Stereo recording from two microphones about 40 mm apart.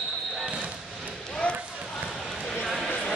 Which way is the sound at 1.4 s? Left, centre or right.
Left.